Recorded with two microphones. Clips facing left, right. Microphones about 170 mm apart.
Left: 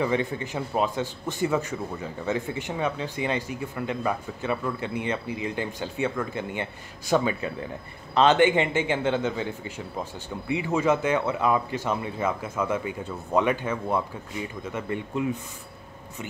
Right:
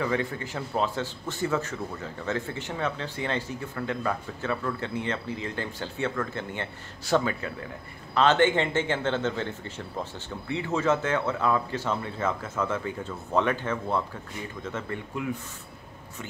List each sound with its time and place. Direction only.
0.0 s speech: 20° left (ahead or behind)